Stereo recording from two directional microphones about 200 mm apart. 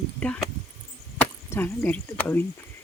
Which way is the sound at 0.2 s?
5° left (ahead or behind).